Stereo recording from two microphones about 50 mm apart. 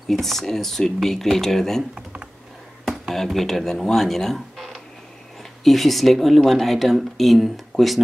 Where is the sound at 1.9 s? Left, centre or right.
Right.